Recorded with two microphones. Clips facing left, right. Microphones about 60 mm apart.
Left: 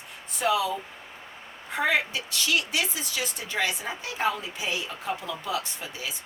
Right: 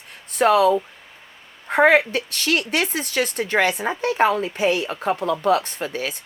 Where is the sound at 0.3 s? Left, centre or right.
Right.